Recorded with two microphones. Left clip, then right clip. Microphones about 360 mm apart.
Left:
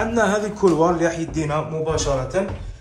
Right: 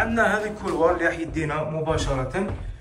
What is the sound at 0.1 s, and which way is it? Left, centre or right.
A man's voice, centre.